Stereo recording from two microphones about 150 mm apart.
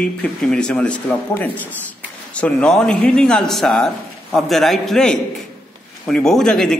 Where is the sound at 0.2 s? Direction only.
5° left (ahead or behind).